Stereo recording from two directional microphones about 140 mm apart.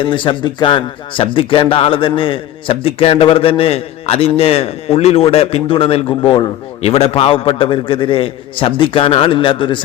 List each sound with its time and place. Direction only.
0.0 s a man's voice: 35° left (ahead or behind)